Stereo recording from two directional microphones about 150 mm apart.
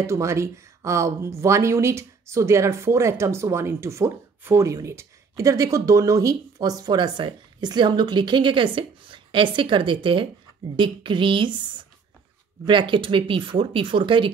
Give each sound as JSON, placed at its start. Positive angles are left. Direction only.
{"t": 0.0, "sound": "speech", "side_deg": -20}
{"t": 12.6, "sound": "speech", "side_deg": -35}